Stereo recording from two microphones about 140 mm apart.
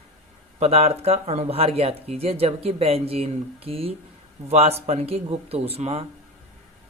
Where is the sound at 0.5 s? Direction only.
45° right (ahead or behind).